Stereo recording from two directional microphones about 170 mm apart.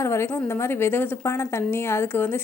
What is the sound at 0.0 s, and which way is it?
A woman's voice, 15° left (ahead or behind).